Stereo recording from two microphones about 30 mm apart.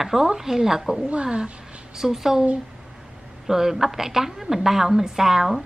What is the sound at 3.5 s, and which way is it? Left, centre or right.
A woman's voice, centre.